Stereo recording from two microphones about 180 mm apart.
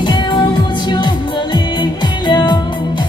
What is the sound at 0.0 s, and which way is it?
Music, 25° left (ahead or behind).